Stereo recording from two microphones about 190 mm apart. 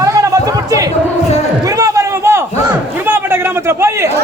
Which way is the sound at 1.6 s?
20° right (ahead or behind).